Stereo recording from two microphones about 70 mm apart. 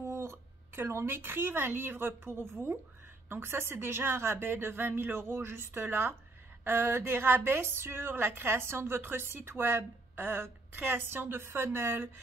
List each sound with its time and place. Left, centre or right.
0.0 s a woman's voice: right